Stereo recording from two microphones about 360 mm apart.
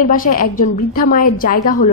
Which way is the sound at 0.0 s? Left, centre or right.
Left.